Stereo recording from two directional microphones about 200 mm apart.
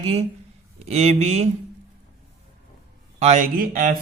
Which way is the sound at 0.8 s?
30° right (ahead or behind).